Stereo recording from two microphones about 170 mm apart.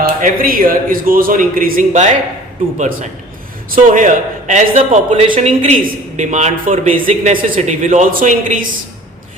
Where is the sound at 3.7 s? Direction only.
50° right (ahead or behind).